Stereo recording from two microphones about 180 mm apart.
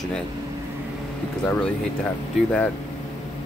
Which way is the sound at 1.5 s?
5° left (ahead or behind).